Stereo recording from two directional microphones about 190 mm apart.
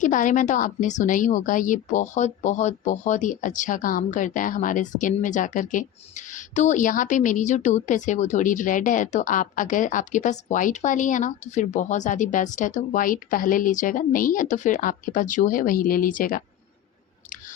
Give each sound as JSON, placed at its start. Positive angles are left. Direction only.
{"t": 0.0, "sound": "a woman's voice", "side_deg": 40}